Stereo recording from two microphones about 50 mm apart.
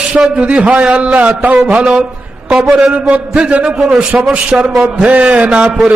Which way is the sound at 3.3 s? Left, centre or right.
Right.